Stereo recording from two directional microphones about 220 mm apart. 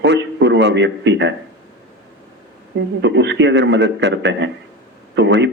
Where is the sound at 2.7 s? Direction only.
55° right (ahead or behind).